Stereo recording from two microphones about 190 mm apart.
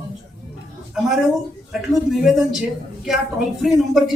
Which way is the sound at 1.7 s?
Centre (ahead or behind).